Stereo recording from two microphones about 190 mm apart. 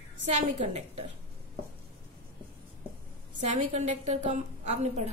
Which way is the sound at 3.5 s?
35° right (ahead or behind).